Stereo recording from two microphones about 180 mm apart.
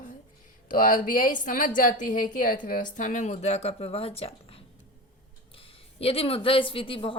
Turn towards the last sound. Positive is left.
turn(degrees=30)  # may be behind; listen again after turning